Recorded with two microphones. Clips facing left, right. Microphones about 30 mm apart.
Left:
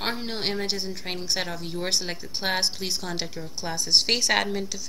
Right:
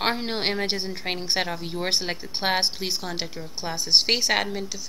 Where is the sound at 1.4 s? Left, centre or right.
Centre.